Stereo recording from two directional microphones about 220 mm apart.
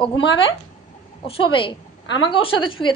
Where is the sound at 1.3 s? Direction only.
25° left (ahead or behind).